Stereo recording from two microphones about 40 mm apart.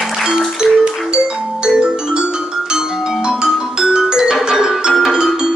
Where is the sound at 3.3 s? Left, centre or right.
Centre.